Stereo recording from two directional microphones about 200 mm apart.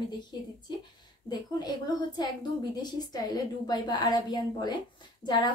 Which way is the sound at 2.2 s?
20° left (ahead or behind).